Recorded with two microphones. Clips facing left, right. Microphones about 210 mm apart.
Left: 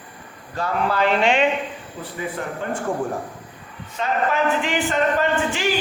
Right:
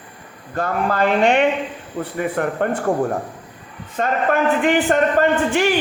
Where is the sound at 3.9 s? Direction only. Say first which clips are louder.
Right 3 dB; 50° right (ahead or behind).